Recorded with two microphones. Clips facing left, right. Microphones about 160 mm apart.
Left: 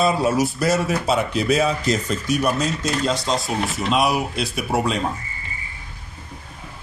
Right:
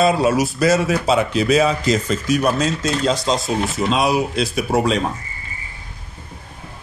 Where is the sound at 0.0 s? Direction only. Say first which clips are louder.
Right 3 dB; 90° right.